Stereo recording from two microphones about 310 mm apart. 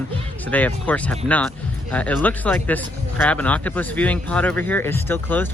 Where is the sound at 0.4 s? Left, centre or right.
Centre.